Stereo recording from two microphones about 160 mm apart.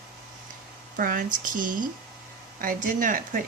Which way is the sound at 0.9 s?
60° right (ahead or behind).